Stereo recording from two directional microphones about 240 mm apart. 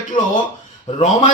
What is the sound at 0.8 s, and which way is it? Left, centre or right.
Speech, left.